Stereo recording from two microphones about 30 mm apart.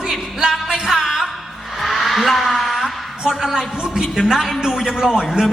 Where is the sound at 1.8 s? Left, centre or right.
Centre.